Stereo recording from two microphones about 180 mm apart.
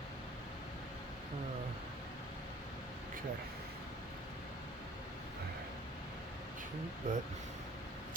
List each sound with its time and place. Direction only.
7.1 s speech: 45° right (ahead or behind)